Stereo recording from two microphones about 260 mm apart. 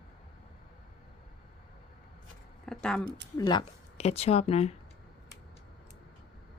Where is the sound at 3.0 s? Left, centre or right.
Right.